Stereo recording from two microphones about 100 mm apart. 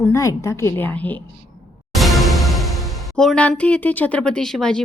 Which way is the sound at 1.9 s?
Centre (ahead or behind).